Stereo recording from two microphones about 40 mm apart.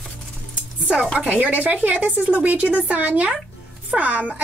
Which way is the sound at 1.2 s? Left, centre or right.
Right.